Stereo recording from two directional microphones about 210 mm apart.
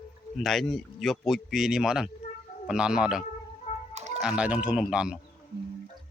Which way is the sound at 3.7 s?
30° left (ahead or behind).